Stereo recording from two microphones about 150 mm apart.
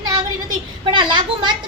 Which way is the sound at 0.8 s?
30° right (ahead or behind).